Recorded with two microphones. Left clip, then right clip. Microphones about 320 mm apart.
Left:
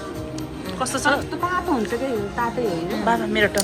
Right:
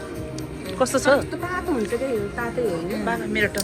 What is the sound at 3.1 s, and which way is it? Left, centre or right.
Speech, centre.